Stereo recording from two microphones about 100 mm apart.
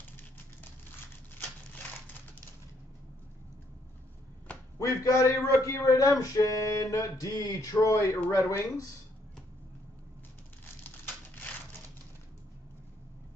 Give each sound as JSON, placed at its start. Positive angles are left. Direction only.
{"t": 4.7, "sound": "a man's voice", "side_deg": 35}